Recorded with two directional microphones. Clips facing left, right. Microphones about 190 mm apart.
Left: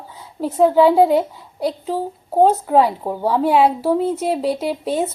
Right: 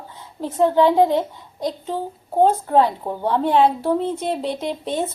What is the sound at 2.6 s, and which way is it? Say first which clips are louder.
A woman's voice: left 2 dB; 10° left (ahead or behind).